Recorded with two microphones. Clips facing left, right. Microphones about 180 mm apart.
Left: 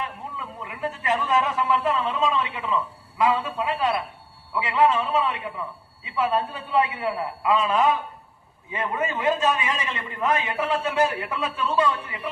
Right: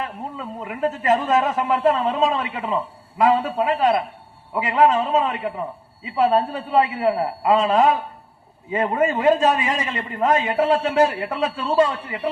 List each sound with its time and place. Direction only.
0.0 s a man's voice: 45° right (ahead or behind)
6.7 s a man's voice: 30° right (ahead or behind)
7.4 s a man's voice: 45° right (ahead or behind)
10.6 s a man's voice: 30° right (ahead or behind)